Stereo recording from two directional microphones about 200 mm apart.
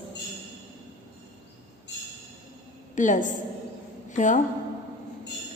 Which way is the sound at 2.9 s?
40° left (ahead or behind).